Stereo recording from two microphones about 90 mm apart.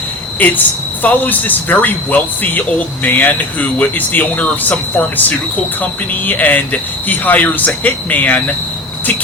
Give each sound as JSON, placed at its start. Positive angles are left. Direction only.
{"t": 0.3, "sound": "a man's voice", "side_deg": 20}